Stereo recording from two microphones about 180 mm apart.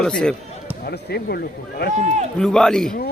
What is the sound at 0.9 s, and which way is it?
Speech, 60° left (ahead or behind).